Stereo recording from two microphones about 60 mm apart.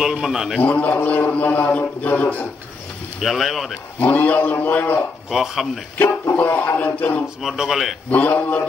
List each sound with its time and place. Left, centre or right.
0.0 s speech: centre
0.6 s a man's voice: left
3.2 s speech: centre
4.1 s a man's voice: left
5.3 s speech: centre
6.2 s a sound: left
6.5 s a man's voice: left
7.4 s speech: centre
8.1 s a man's voice: left